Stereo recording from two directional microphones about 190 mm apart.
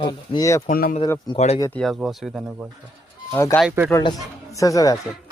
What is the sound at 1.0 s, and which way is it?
Speech, 20° left (ahead or behind).